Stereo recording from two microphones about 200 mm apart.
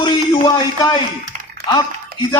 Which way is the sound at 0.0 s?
20° left (ahead or behind).